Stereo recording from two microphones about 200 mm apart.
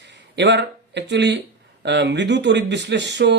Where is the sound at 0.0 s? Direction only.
60° right (ahead or behind).